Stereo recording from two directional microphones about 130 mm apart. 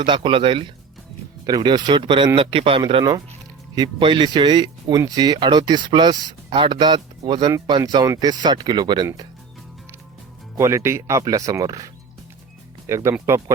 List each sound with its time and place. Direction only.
0.0 s speech: 40° right (ahead or behind)
1.5 s speech: 30° right (ahead or behind)
10.6 s speech: 20° right (ahead or behind)
12.9 s speech: 20° right (ahead or behind)